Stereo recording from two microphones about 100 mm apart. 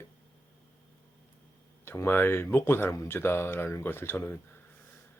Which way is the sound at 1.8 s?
25° left (ahead or behind).